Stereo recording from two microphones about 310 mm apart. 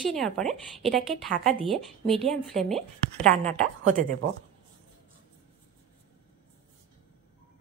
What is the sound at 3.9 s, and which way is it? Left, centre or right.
Speech, right.